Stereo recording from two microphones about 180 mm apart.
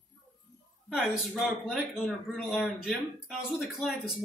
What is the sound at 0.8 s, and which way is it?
A man's voice, centre (ahead or behind).